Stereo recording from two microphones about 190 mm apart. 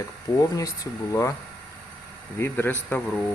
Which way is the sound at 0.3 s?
20° left (ahead or behind).